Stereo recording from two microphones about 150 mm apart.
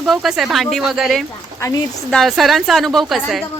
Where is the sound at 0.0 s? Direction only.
Centre (ahead or behind).